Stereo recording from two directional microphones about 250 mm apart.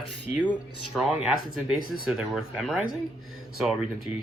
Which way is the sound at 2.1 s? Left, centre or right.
Centre.